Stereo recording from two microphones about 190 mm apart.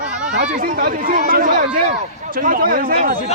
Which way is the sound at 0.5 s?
45° right (ahead or behind).